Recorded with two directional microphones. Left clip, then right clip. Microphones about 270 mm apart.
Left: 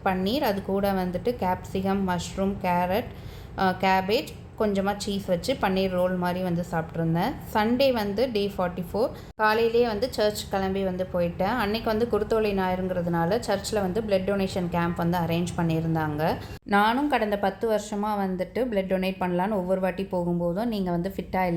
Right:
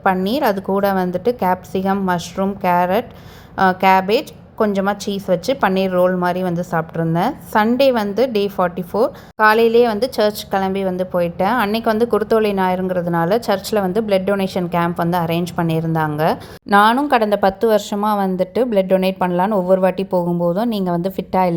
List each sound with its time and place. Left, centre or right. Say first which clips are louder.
0.0 s a woman's voice: right 9 dB; right